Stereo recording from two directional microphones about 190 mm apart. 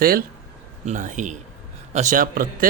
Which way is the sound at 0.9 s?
40° right (ahead or behind).